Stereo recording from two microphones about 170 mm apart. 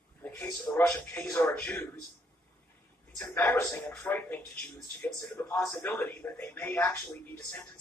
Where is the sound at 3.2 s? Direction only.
10° left (ahead or behind).